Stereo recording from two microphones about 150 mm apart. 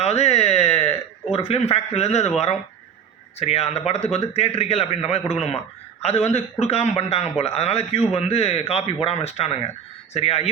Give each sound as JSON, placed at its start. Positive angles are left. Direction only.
{"t": 0.0, "sound": "a sound", "side_deg": 45}
{"t": 1.3, "sound": "a man's voice", "side_deg": 40}
{"t": 3.3, "sound": "a man's voice", "side_deg": 45}